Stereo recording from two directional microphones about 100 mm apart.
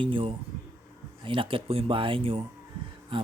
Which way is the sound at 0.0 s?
60° right (ahead or behind).